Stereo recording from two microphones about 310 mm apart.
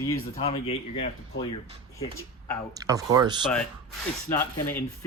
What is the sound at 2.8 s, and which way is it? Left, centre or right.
Speech, centre.